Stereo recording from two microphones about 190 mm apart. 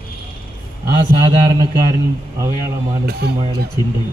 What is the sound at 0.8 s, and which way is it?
Speech, 20° right (ahead or behind).